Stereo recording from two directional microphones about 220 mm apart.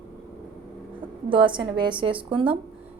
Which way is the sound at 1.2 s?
20° right (ahead or behind).